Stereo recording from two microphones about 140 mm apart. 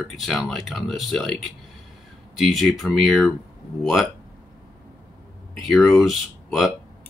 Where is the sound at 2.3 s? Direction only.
Centre (ahead or behind).